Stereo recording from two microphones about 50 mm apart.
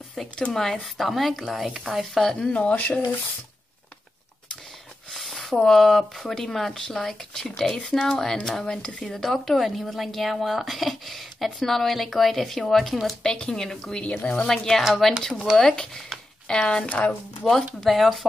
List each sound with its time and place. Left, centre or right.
0.5 s speech: centre
2.5 s speech: left
5.1 s speech: centre
13.2 s speech: centre
14.0 s speech: left
14.3 s speech: centre
17.7 s speech: centre